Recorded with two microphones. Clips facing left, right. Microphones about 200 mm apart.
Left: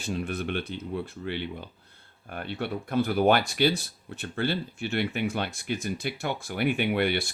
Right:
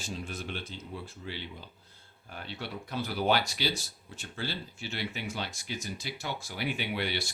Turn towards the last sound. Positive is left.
turn(degrees=55)  # may be behind; listen again after turning